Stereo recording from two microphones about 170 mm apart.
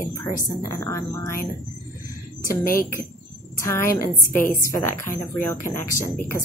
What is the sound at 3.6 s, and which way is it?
A woman's voice, 15° left (ahead or behind).